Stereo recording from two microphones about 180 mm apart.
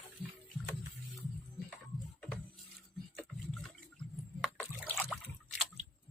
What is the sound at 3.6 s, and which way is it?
Water, centre (ahead or behind).